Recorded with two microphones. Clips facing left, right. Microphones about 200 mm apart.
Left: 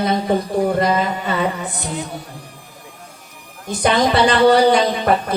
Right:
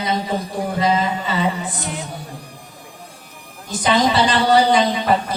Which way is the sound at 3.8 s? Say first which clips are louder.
Left 2 dB; 55° left (ahead or behind).